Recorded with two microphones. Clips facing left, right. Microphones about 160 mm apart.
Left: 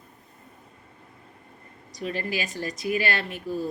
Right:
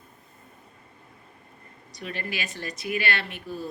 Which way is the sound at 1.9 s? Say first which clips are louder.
Left 5 dB; 35° left (ahead or behind).